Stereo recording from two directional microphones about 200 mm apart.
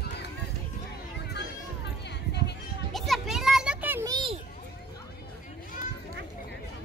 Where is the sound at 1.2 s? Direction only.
55° left (ahead or behind).